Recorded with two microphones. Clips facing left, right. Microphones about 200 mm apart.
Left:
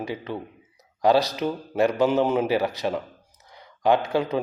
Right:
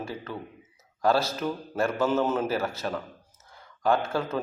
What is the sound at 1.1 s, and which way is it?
A man's voice, 15° left (ahead or behind).